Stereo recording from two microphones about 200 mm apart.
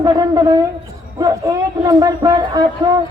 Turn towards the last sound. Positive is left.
turn(degrees=-20)  # may be behind; listen again after turning